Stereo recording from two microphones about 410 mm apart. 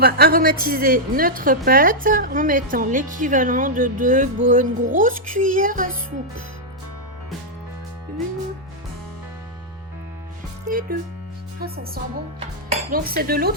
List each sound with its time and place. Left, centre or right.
0.0 s a woman's voice: right
10.7 s music: centre
12.9 s a woman's voice: right